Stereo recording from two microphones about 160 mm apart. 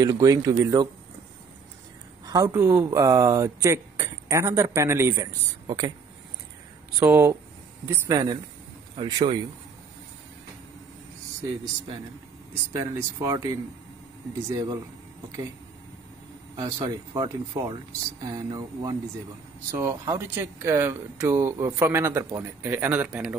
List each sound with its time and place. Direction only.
0.0 s speech: 20° right (ahead or behind)
2.2 s speech: 20° right (ahead or behind)
7.0 s speech: 15° right (ahead or behind)
12.7 s speech: 20° right (ahead or behind)
14.5 s speech: 20° right (ahead or behind)
16.6 s speech: 20° right (ahead or behind)